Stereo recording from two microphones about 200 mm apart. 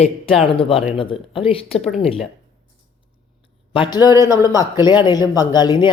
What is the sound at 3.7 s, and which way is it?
Speech, 20° left (ahead or behind).